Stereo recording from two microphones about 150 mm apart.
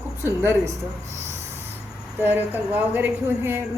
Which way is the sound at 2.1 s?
10° right (ahead or behind).